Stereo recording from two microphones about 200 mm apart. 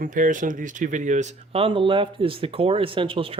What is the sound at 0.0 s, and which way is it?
Speech, 40° right (ahead or behind).